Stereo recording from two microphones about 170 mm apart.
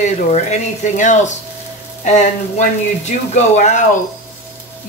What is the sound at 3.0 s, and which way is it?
Speech, 45° left (ahead or behind).